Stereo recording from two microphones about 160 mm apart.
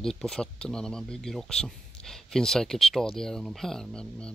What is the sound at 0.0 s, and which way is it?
Speech, centre (ahead or behind).